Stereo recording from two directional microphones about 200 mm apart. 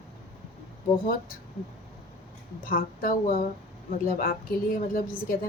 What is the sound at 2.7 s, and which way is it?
Speech, 45° left (ahead or behind).